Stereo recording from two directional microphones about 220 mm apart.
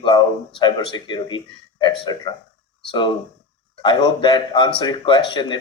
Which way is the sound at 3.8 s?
20° left (ahead or behind).